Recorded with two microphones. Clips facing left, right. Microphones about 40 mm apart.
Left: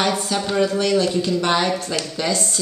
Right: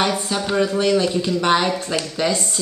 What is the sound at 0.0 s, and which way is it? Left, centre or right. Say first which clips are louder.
A woman's voice: even; centre.